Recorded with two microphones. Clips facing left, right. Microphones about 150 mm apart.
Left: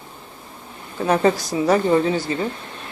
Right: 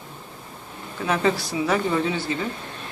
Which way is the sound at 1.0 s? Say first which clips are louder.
Left 5 dB; 40° left (ahead or behind).